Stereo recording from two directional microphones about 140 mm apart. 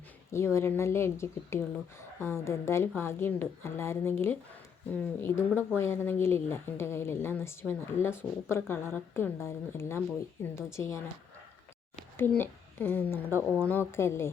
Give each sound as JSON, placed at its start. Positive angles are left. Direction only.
{"t": 0.3, "sound": "speech", "side_deg": 20}
{"t": 12.4, "sound": "speech", "side_deg": 15}